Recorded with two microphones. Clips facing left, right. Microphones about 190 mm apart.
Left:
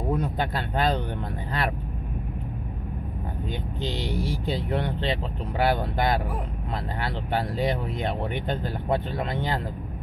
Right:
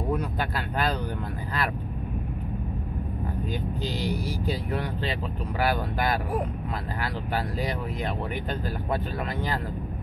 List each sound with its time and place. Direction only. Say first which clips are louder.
0.1 s speech: left 3 dB; 25° left (ahead or behind)
3.8 s speech: left 3 dB; 25° left (ahead or behind)